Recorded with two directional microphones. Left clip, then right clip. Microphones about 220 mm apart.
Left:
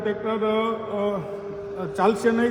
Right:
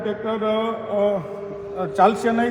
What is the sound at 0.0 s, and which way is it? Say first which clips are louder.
A man's voice: right 1 dB; centre (ahead or behind).